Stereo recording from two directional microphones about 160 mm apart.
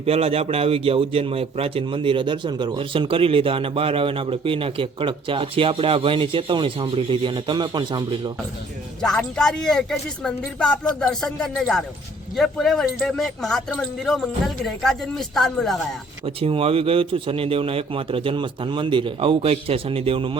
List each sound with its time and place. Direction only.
0.0 s a man's voice: 40° right (ahead or behind)
9.0 s speech: 5° left (ahead or behind)
16.2 s a man's voice: 35° right (ahead or behind)